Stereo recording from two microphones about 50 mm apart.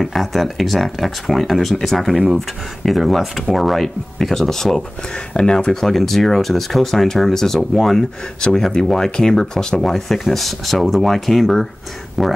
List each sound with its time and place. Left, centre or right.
0.0 s speech: centre
8.4 s speech: centre